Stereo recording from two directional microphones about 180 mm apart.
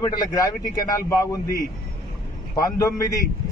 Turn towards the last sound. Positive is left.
turn(degrees=20)  # may be behind; listen again after turning